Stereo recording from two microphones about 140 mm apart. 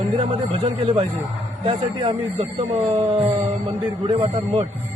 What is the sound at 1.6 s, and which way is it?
A man's voice, 40° right (ahead or behind).